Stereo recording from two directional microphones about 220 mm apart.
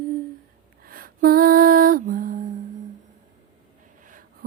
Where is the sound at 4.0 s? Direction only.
35° right (ahead or behind).